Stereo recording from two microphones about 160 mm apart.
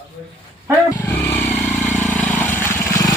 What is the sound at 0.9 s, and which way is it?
Vehicle, 10° left (ahead or behind).